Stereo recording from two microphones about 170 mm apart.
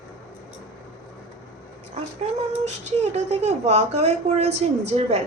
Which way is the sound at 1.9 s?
40° right (ahead or behind).